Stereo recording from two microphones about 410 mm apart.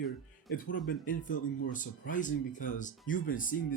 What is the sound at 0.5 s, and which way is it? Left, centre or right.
Speech, left.